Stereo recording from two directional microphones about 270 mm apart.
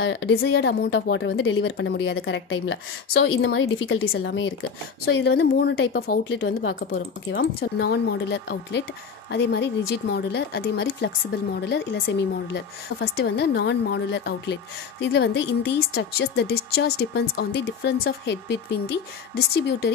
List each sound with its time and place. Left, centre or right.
0.0 s a woman's voice: left